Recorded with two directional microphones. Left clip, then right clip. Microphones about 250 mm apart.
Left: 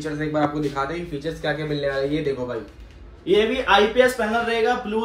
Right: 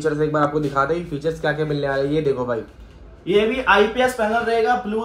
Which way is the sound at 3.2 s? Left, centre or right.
Right.